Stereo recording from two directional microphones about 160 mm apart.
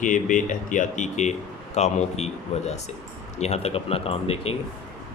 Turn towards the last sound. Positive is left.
turn(degrees=40)  # may be behind; listen again after turning